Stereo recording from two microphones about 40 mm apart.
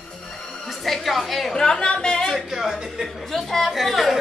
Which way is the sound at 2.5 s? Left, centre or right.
Centre.